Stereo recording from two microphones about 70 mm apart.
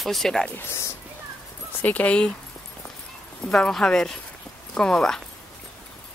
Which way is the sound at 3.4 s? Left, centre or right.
Centre.